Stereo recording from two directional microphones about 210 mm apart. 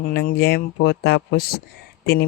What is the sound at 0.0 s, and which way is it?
Speech, 45° left (ahead or behind).